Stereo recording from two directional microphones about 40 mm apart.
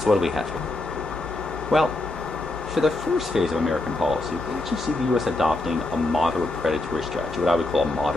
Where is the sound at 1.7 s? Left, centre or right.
Centre.